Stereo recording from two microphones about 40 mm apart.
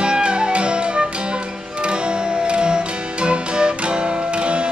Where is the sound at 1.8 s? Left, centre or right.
Right.